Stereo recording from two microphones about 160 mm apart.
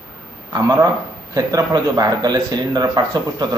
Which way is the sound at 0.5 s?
20° right (ahead or behind).